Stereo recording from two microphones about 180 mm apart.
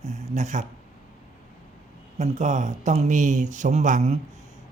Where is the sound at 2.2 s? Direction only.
40° right (ahead or behind).